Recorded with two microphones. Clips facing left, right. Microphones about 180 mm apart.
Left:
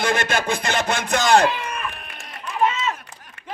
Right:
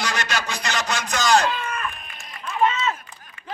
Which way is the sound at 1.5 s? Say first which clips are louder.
Even; 15° left (ahead or behind).